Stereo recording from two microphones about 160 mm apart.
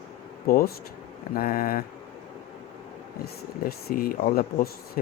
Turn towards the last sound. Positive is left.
turn(degrees=65)  # may be behind; listen again after turning